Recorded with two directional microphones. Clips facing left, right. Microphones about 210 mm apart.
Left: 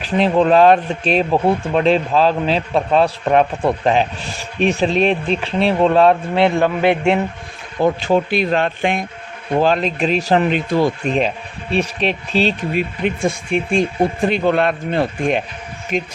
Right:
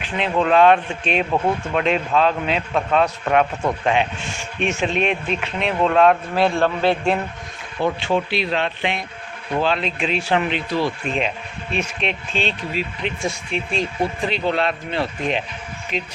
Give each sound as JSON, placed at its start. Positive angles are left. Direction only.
{"t": 0.0, "sound": "speech", "side_deg": 35}
{"t": 7.8, "sound": "speech", "side_deg": 40}
{"t": 12.7, "sound": "speech", "side_deg": 55}